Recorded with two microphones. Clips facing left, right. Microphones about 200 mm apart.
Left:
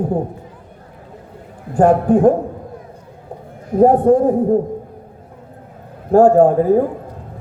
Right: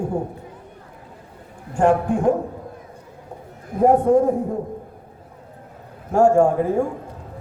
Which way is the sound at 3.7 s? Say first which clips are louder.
Left 4 dB; 35° left (ahead or behind).